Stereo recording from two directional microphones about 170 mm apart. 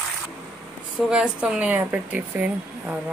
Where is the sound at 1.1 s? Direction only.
5° right (ahead or behind).